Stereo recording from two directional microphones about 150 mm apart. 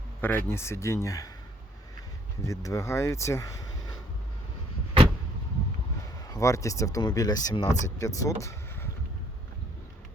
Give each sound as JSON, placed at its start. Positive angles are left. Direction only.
{"t": 0.2, "sound": "speech", "side_deg": 15}
{"t": 2.4, "sound": "speech", "side_deg": 20}
{"t": 6.2, "sound": "speech", "side_deg": 20}
{"t": 7.7, "sound": "speech", "side_deg": 55}
{"t": 7.9, "sound": "speech", "side_deg": 20}
{"t": 8.4, "sound": "a sound", "side_deg": 20}